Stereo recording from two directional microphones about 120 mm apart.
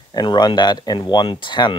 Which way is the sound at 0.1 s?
40° left (ahead or behind).